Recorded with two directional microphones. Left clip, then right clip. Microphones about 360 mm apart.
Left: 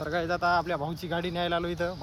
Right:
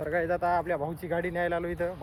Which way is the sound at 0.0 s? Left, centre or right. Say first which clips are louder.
Even; centre.